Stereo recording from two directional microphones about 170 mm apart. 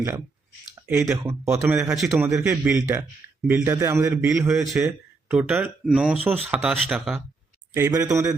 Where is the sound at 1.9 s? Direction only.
Centre (ahead or behind).